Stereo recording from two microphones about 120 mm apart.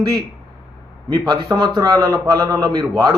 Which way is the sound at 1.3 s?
40° right (ahead or behind).